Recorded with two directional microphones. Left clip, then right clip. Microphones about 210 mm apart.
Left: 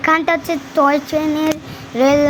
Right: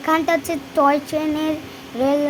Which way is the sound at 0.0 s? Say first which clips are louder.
Left 4 dB; 15° left (ahead or behind).